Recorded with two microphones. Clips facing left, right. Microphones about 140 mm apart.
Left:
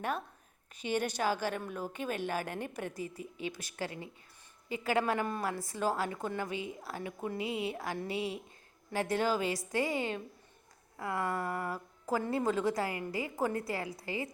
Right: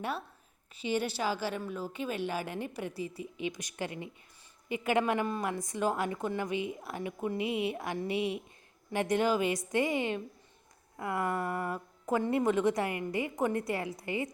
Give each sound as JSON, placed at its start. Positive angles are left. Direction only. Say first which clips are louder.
{"t": 0.8, "sound": "a woman's voice", "louder": "even", "side_deg": 50}
{"t": 3.5, "sound": "a woman's voice", "louder": "right 2 dB", "side_deg": -15}